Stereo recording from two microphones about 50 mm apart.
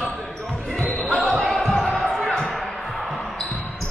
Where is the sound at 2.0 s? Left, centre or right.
Centre.